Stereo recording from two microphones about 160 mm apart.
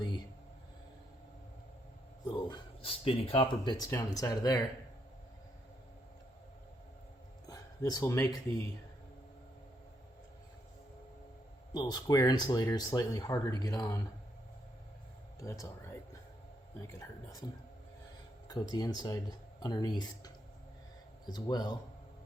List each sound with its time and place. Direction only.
2.3 s speech: 30° left (ahead or behind)
7.4 s speech: 25° left (ahead or behind)
11.7 s speech: 25° left (ahead or behind)
15.4 s speech: 20° left (ahead or behind)
18.4 s speech: 25° left (ahead or behind)
21.3 s speech: 25° left (ahead or behind)